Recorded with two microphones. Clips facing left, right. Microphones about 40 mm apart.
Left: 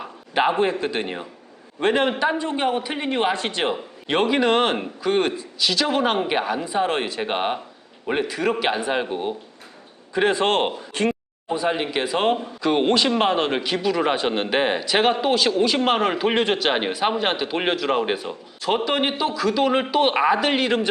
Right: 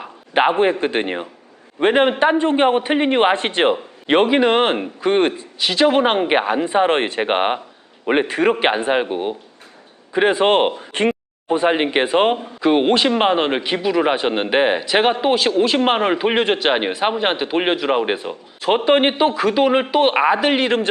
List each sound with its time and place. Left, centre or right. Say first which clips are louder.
0.3 s a man's voice: right 4 dB; right
12.4 s a man's voice: right 4 dB; centre; by 19.6 s right
19.6 s a man's voice: right 3 dB; centre